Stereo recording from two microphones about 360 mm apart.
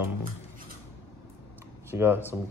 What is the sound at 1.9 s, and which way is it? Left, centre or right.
Speech, centre.